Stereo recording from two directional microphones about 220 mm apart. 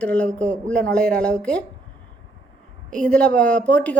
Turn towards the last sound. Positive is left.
turn(degrees=5)  # may be behind; listen again after turning